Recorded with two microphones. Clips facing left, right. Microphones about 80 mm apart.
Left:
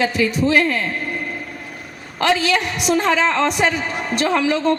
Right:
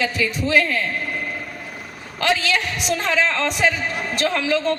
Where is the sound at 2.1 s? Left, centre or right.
Left.